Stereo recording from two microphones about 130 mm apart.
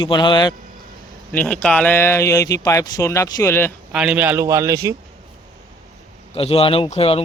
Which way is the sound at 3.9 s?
5° right (ahead or behind).